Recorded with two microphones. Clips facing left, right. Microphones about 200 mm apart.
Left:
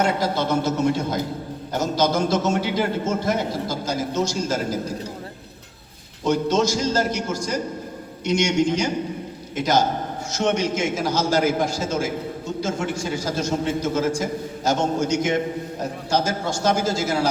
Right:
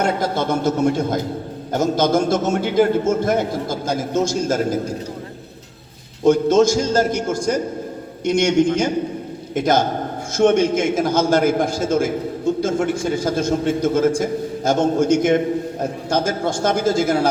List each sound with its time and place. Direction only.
0.0 s a man's voice: 50° right (ahead or behind)
6.2 s a man's voice: 50° right (ahead or behind)